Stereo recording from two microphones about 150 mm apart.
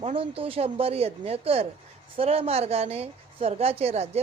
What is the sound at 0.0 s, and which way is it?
A woman's voice, 40° right (ahead or behind).